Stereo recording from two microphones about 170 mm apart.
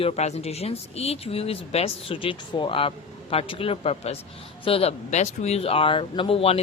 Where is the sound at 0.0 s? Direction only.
40° left (ahead or behind).